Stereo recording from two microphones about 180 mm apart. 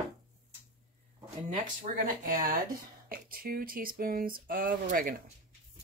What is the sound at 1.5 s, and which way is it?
Speech, 50° right (ahead or behind).